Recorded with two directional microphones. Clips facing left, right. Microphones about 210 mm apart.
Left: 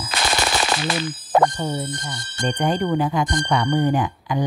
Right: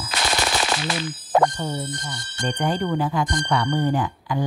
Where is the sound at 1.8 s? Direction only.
55° left (ahead or behind).